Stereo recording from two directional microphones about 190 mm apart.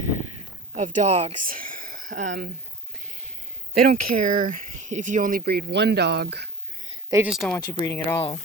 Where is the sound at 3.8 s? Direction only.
45° right (ahead or behind).